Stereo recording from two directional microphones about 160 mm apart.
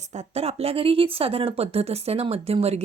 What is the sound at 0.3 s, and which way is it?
Speech, 40° right (ahead or behind).